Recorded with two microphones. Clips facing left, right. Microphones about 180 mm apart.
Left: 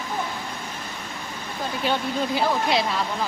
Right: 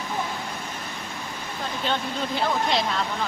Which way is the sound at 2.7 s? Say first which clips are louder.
Left 2 dB; 5° left (ahead or behind).